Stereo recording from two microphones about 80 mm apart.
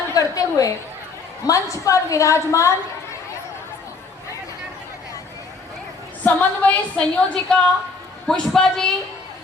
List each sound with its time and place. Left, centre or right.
0.1 s a sound: left
1.5 s a woman's voice: left
6.2 s a woman's voice: left